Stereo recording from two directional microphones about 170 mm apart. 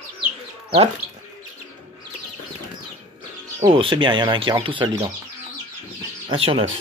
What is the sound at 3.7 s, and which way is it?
Speech, 30° right (ahead or behind).